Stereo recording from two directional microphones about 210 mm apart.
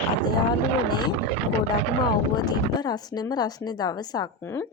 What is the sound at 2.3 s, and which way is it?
A woman's voice, 20° left (ahead or behind).